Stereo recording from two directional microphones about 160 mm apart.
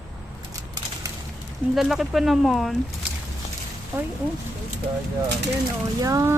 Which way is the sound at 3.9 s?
15° right (ahead or behind).